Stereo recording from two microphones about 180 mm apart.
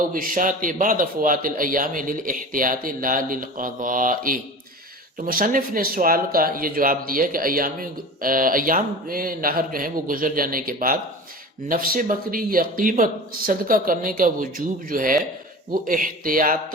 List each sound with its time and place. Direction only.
0.1 s speech: 50° right (ahead or behind)